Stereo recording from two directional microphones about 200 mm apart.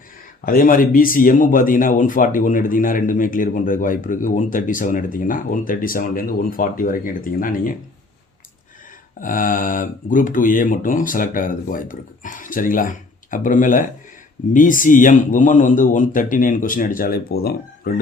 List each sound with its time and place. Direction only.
0.4 s speech: 45° left (ahead or behind)
9.2 s speech: 45° left (ahead or behind)